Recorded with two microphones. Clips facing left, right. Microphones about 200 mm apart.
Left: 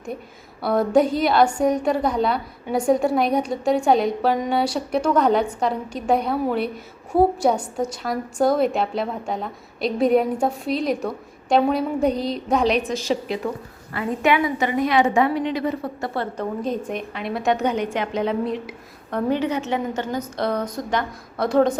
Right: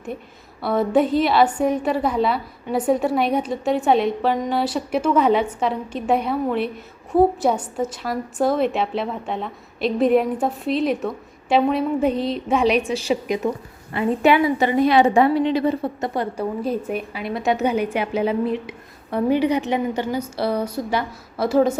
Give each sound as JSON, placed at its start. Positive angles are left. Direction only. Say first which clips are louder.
{"t": 0.6, "sound": "a woman's voice", "louder": "left 1 dB", "side_deg": 0}
{"t": 12.9, "sound": "a woman's voice", "louder": "right 2 dB", "side_deg": -15}
{"t": 14.2, "sound": "a woman's voice", "louder": "right 3 dB", "side_deg": -30}